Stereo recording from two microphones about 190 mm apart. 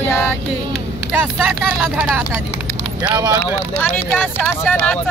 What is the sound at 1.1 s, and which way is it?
Speech, 5° right (ahead or behind).